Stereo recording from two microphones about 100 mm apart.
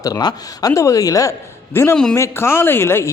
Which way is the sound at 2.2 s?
25° left (ahead or behind).